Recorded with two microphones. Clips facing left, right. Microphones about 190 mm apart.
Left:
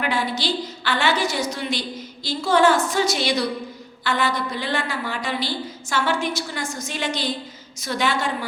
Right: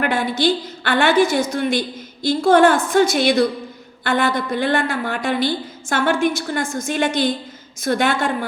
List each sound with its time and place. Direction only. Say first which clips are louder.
0.0 s a woman's voice: right 6 dB; 50° right (ahead or behind)